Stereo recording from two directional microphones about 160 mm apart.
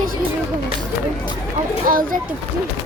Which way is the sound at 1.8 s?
60° right (ahead or behind).